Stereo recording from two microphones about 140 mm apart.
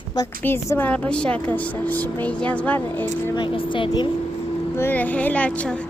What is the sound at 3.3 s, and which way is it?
Speech, 35° left (ahead or behind).